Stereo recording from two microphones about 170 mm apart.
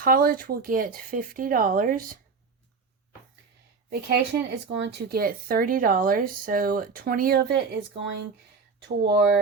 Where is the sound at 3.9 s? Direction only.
70° right (ahead or behind).